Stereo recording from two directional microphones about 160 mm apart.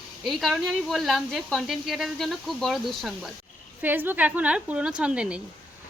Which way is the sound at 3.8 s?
10° right (ahead or behind).